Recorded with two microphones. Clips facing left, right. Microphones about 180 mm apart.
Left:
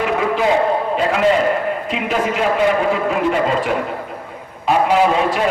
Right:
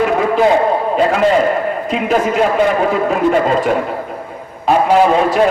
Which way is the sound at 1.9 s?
45° right (ahead or behind).